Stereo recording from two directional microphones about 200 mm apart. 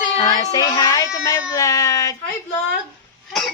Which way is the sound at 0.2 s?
20° left (ahead or behind).